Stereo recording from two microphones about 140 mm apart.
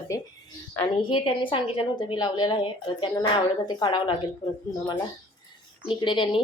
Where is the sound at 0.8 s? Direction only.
35° left (ahead or behind).